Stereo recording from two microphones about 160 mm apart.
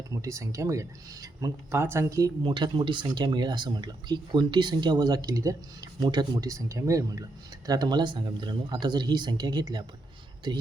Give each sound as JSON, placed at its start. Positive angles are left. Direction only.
{"t": 0.1, "sound": "speech", "side_deg": -20}